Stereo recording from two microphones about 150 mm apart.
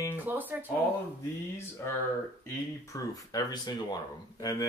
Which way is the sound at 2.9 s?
25° left (ahead or behind).